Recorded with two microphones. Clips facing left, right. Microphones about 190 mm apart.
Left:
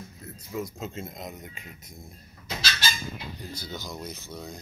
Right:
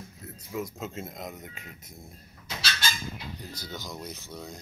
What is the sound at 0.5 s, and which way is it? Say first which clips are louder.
Speech: left 1 dB; 5° right (ahead or behind).